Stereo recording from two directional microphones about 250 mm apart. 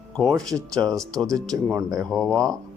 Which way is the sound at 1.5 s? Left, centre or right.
Centre.